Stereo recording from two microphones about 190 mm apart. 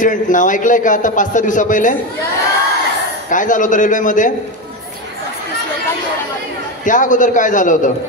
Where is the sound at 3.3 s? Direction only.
45° left (ahead or behind).